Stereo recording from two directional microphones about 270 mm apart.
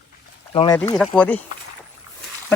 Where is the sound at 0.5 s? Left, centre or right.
Centre.